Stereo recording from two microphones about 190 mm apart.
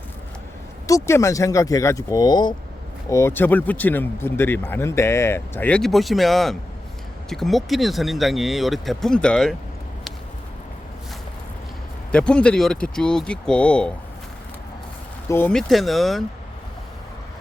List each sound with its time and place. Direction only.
0.9 s speech: 15° left (ahead or behind)
12.1 s speech: 5° left (ahead or behind)
15.3 s speech: 10° left (ahead or behind)